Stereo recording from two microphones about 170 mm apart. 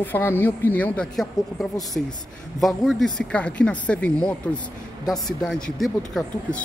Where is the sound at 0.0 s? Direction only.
10° left (ahead or behind).